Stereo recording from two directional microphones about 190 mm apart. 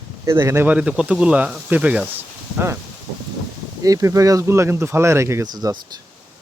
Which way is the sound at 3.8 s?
15° right (ahead or behind).